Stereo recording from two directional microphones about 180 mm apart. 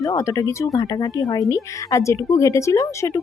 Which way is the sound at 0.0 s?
20° left (ahead or behind).